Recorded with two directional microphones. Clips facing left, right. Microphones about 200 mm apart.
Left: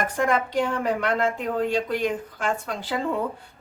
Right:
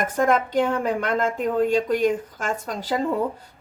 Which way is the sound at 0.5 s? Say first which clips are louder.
Right 2 dB; 45° right (ahead or behind).